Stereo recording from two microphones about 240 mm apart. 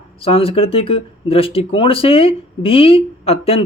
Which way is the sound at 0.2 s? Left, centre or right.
Left.